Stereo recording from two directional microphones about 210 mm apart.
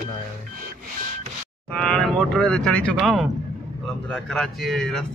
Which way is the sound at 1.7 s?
5° left (ahead or behind).